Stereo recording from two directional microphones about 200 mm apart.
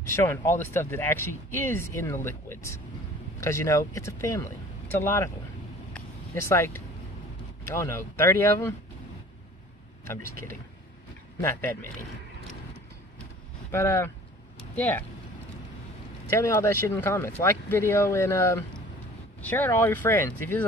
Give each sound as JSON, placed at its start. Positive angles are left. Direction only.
{"t": 0.1, "sound": "speech", "side_deg": 15}
{"t": 6.5, "sound": "speech", "side_deg": 15}
{"t": 10.0, "sound": "speech", "side_deg": 10}
{"t": 13.7, "sound": "speech", "side_deg": 15}
{"t": 16.3, "sound": "speech", "side_deg": 15}